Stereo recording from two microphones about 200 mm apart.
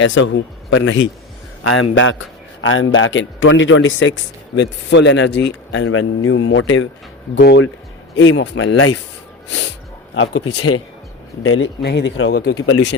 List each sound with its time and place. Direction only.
0.0 s a man's voice: 70° left (ahead or behind)
1.6 s a man's voice: 80° left
7.3 s a man's voice: 55° left (ahead or behind); by 8.9 s 90° left
10.2 s speech: 90° left
11.4 s speech: 75° left (ahead or behind)
12.3 s speech: 50° left (ahead or behind)
12.6 s a man's voice: 70° left (ahead or behind)